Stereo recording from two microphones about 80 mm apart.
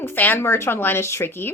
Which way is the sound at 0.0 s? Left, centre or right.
Left.